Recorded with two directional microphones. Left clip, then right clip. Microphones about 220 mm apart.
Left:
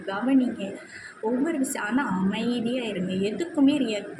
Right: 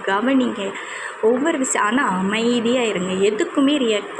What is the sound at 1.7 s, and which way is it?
A woman's voice, 10° right (ahead or behind).